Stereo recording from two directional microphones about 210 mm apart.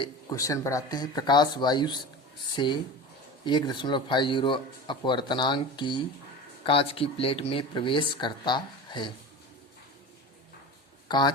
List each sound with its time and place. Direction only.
0.0 s speech: 15° left (ahead or behind)
11.1 s speech: 20° left (ahead or behind)